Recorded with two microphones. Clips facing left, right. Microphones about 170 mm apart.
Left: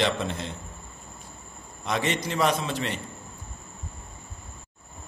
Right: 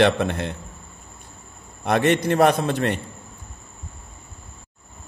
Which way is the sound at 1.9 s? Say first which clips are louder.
Right 9 dB; 60° right (ahead or behind).